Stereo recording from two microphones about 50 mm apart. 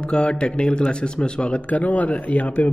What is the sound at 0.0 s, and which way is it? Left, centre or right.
Speech, centre.